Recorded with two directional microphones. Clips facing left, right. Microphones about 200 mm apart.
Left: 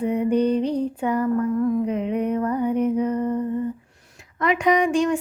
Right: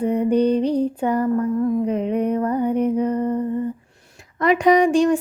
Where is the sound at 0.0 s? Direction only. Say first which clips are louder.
Right 2 dB; 35° right (ahead or behind).